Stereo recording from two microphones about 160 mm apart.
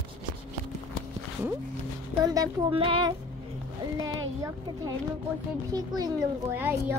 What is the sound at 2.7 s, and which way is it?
Music, 35° right (ahead or behind).